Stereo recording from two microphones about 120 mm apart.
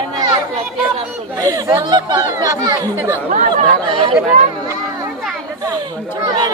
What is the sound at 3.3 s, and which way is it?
Speech, 90° right.